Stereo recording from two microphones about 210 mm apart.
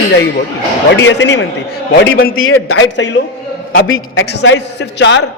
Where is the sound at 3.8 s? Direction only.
80° left.